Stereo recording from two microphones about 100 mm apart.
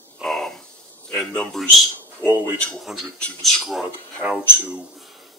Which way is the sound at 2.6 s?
10° left (ahead or behind).